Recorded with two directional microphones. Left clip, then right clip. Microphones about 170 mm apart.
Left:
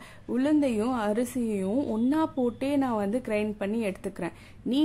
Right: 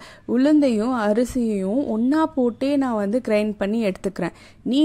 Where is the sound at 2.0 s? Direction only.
35° right (ahead or behind).